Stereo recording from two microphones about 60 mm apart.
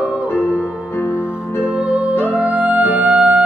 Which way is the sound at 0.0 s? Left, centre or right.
Centre.